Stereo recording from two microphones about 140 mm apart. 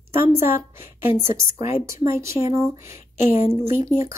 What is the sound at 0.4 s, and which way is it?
A woman's voice, 15° right (ahead or behind).